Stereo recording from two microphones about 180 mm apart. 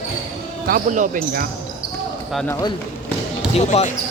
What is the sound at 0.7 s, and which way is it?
Speech, 45° right (ahead or behind).